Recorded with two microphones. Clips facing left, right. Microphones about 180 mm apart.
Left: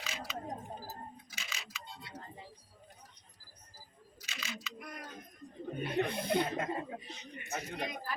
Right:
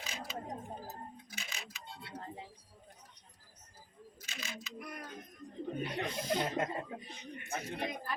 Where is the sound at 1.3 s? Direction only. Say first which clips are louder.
Even; 55° right (ahead or behind).